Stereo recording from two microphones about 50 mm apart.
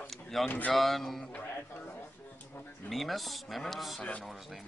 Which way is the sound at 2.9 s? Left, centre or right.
Centre.